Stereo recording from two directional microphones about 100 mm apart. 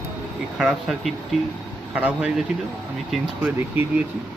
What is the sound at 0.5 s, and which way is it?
Speech, 5° right (ahead or behind).